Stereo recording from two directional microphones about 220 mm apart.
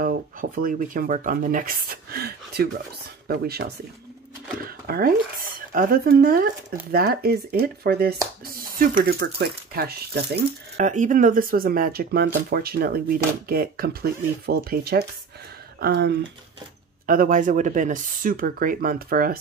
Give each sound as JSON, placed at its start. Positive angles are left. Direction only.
{"t": 0.0, "sound": "speech", "side_deg": -40}
{"t": 4.6, "sound": "speech", "side_deg": -40}
{"t": 10.8, "sound": "speech", "side_deg": -35}